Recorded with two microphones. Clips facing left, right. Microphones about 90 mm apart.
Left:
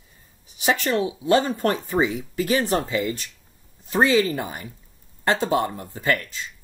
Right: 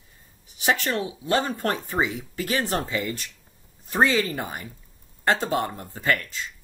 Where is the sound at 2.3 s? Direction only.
15° left (ahead or behind).